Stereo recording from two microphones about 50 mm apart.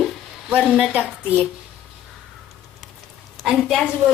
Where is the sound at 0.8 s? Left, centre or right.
Right.